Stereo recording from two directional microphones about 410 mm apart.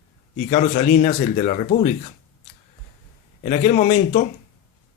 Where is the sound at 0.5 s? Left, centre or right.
Centre.